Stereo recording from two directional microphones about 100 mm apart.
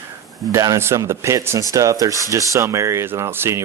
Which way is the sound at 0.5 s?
30° right (ahead or behind).